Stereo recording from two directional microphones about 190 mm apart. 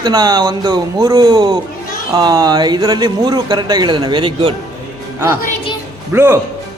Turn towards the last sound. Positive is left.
turn(degrees=-10)  # may be behind; listen again after turning